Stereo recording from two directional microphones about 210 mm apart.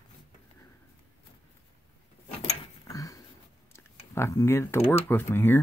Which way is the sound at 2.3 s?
15° left (ahead or behind).